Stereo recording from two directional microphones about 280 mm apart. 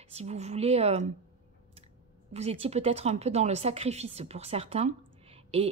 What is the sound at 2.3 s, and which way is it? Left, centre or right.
Speech, right.